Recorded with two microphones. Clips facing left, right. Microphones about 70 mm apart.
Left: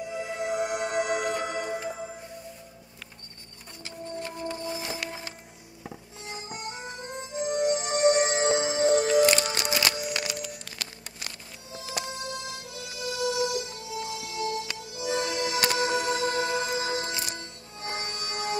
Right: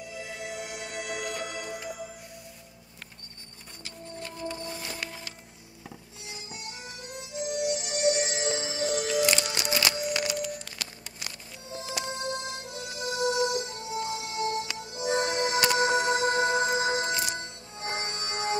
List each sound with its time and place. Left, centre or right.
0.0 s music: left
3.8 s music: left
6.2 s music: left
12.0 s music: right